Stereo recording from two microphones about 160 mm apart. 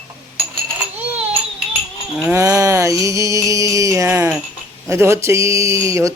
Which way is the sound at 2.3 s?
20° right (ahead or behind).